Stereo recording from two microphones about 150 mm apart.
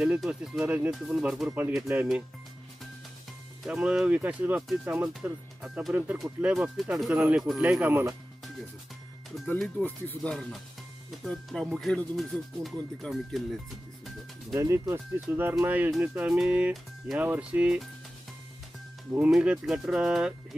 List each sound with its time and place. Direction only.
0.0 s speech: 5° right (ahead or behind)
3.6 s speech: 5° right (ahead or behind)
9.6 s speech: 5° left (ahead or behind)
14.5 s speech: 20° right (ahead or behind)
19.1 s speech: 10° right (ahead or behind)